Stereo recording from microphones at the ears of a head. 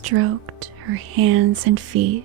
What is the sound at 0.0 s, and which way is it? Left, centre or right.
Speech, right.